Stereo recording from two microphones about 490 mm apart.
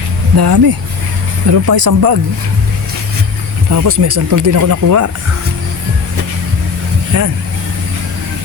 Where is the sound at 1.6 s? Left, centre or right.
Right.